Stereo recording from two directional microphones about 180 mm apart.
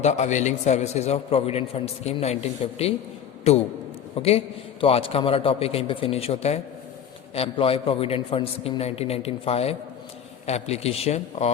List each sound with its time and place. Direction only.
0.0 s a man's voice: 40° left (ahead or behind)